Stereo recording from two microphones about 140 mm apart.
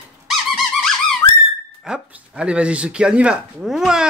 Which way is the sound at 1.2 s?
30° left (ahead or behind).